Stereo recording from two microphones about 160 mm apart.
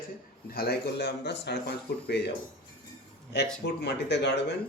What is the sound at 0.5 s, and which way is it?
A man's voice, 75° left (ahead or behind).